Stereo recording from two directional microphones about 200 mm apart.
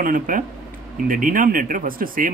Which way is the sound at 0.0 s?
45° right (ahead or behind).